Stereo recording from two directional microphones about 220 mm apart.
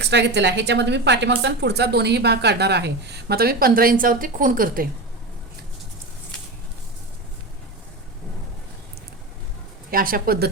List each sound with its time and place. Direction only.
0.0 s a woman's voice: 50° right (ahead or behind)
9.9 s speech: 40° right (ahead or behind)